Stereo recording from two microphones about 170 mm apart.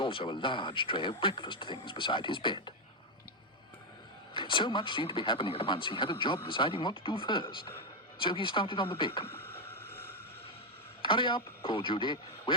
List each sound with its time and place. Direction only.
0.0 s speech: 30° left (ahead or behind)
4.4 s speech: 30° left (ahead or behind)
9.2 s boat: 15° left (ahead or behind)
11.0 s speech: 30° left (ahead or behind)